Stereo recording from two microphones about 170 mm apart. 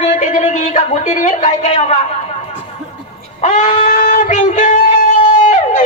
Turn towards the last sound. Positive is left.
turn(degrees=50)  # may be behind; listen again after turning